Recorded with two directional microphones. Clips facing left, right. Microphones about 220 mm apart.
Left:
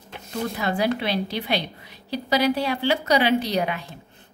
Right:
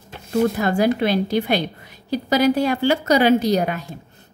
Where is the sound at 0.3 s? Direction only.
50° right (ahead or behind).